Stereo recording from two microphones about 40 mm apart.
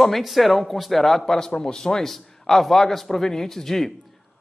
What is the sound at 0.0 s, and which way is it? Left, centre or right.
A man's voice, centre.